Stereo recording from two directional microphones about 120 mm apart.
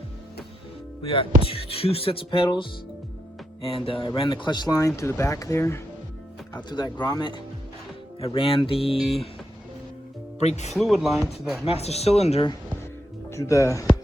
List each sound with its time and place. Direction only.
1.0 s speech: 50° left (ahead or behind); by 5.8 s 20° left (ahead or behind)
6.6 s speech: 40° left (ahead or behind)
8.2 s speech: 50° left (ahead or behind)
10.4 s speech: 70° left (ahead or behind)
10.8 s speech: centre (ahead or behind)
11.6 s speech: 55° left (ahead or behind)
13.3 s speech: 25° left (ahead or behind)